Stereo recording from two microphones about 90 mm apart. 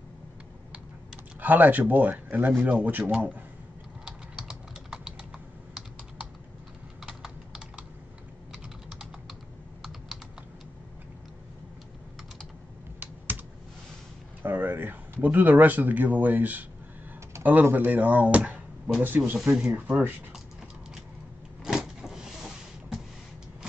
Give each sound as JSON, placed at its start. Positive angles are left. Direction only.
{"t": 1.4, "sound": "speech", "side_deg": -20}
{"t": 4.0, "sound": "computer keyboard", "side_deg": -5}
{"t": 7.0, "sound": "typing", "side_deg": -5}
{"t": 14.4, "sound": "a sound", "side_deg": -20}
{"t": 15.2, "sound": "speech", "side_deg": -20}
{"t": 21.6, "sound": "power windows", "side_deg": -5}